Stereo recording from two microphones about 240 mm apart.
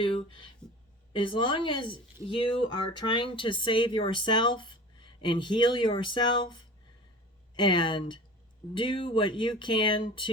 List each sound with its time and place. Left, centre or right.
0.0 s speech: left